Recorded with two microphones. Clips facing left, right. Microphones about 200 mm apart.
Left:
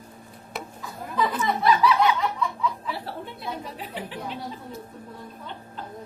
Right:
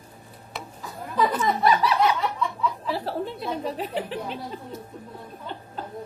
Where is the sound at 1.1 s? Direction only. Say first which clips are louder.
Right 2 dB; 45° right (ahead or behind).